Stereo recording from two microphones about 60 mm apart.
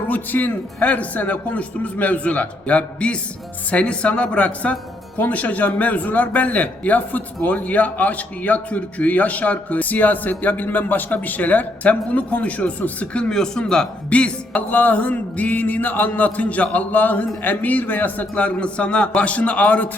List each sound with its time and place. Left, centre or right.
0.1 s a man's voice: left
14.5 s a man's voice: left